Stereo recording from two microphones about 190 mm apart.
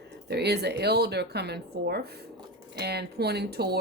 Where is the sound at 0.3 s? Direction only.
60° right (ahead or behind).